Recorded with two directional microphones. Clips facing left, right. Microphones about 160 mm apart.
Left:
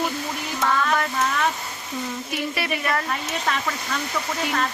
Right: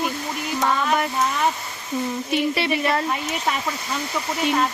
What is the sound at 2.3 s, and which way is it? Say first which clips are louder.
Speech: right 6 dB; 25° right (ahead or behind).